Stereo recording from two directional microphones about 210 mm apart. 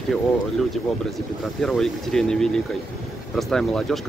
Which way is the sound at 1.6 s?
Centre (ahead or behind).